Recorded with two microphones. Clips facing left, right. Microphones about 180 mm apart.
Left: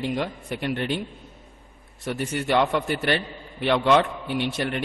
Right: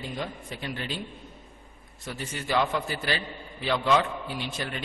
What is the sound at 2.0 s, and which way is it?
A man's voice, 70° left (ahead or behind).